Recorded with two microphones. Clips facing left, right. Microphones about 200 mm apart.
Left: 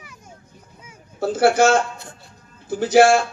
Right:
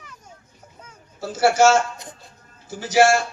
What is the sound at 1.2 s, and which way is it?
Speech, 55° left (ahead or behind).